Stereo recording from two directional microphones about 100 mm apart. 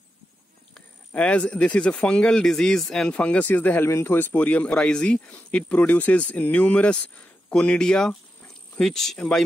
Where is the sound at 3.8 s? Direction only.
30° left (ahead or behind).